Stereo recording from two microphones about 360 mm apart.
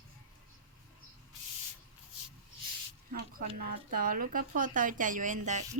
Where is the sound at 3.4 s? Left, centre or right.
Right.